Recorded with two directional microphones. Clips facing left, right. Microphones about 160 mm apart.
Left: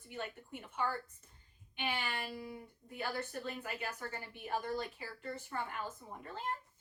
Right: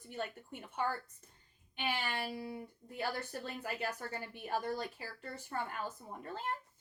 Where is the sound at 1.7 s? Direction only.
35° right (ahead or behind).